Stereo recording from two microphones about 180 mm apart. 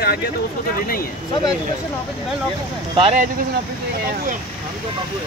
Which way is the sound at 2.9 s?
30° right (ahead or behind).